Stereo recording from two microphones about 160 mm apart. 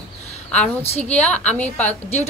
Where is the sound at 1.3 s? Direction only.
10° left (ahead or behind).